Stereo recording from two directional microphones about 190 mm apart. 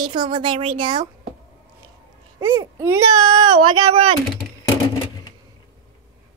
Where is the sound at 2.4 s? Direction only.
10° right (ahead or behind).